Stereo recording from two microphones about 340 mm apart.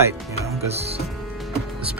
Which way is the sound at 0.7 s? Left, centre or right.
Centre.